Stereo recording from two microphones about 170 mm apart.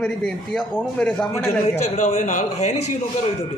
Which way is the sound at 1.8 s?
40° left (ahead or behind).